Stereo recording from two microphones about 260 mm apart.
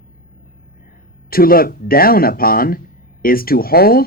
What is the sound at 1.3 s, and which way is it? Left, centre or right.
Speech, left.